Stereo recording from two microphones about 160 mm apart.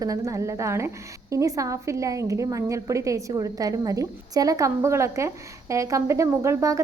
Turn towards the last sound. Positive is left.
turn(degrees=-20)  # may be behind; listen again after turning